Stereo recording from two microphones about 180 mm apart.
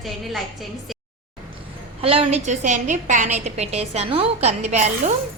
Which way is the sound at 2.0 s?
30° right (ahead or behind).